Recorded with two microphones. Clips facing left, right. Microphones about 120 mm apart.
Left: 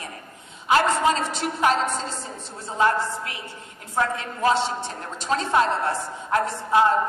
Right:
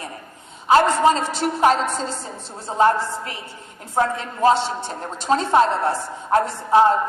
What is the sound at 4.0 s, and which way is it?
A woman's voice, 30° right (ahead or behind).